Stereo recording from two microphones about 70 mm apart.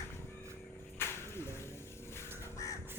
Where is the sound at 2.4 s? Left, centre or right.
Left.